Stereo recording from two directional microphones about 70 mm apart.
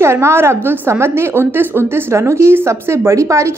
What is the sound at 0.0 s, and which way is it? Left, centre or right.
A woman's voice, right.